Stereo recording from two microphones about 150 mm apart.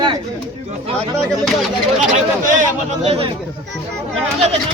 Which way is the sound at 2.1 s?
60° right (ahead or behind).